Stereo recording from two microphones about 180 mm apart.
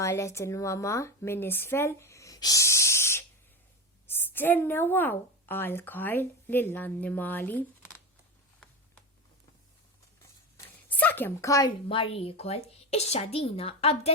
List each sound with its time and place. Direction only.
0.0 s a woman's voice: 15° left (ahead or behind)
10.8 s a sound: 10° left (ahead or behind)
11.9 s a woman's voice: 30° left (ahead or behind)